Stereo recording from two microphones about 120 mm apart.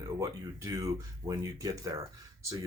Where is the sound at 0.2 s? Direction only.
25° right (ahead or behind).